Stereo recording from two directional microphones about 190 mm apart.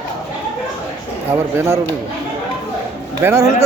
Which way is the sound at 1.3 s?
15° right (ahead or behind).